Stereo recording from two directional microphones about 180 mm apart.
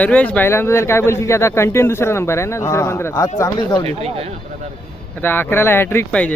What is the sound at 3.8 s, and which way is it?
Speech, 35° right (ahead or behind).